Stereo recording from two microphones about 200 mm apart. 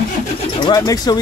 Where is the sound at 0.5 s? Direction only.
20° left (ahead or behind).